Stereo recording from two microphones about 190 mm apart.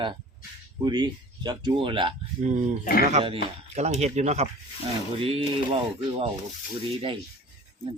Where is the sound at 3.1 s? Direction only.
35° right (ahead or behind).